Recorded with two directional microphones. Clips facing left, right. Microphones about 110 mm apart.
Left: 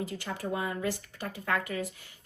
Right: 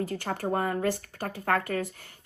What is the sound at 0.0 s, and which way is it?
Speech, 50° right (ahead or behind).